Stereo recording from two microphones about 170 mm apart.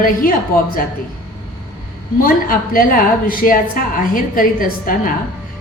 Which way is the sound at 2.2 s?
55° left (ahead or behind).